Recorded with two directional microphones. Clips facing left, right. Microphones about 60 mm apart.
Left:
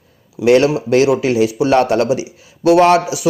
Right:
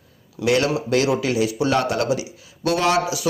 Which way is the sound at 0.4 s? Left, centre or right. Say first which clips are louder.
Left 8 dB; left.